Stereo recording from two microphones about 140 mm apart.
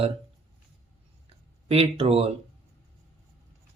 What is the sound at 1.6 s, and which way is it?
Speech, 45° right (ahead or behind).